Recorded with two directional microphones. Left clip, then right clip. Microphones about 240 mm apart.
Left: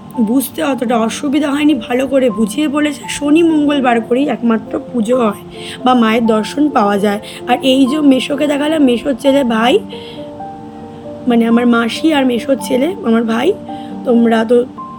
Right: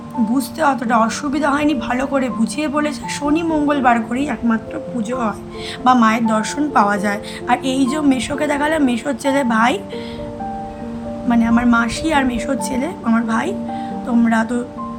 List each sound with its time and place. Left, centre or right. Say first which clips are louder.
0.3 s speech: even; centre
5.0 s speech: left 9 dB; centre
5.8 s speech: left 2 dB; centre
11.3 s speech: left 4 dB; centre